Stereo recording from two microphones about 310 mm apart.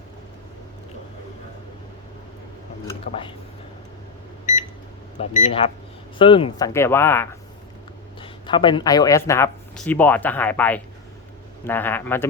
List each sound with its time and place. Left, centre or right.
3.1 s speech: centre
4.5 s microwave oven: left
5.1 s speech: left; by 12.3 s centre